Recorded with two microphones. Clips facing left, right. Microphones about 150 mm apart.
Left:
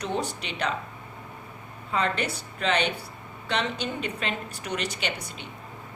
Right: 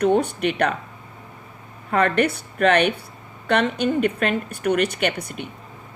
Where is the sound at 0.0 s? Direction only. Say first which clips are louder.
Right 11 dB; 55° right (ahead or behind).